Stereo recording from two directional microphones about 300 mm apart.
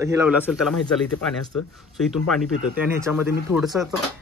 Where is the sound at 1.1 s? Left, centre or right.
Left.